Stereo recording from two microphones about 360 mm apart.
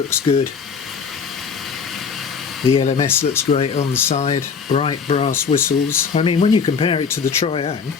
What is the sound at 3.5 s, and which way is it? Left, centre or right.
Speech, centre.